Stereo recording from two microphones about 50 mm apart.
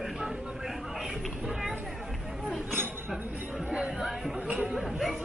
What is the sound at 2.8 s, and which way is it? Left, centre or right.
Chink, right.